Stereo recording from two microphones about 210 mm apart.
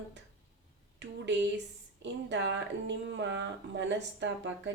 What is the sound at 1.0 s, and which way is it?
Speech, 60° right (ahead or behind).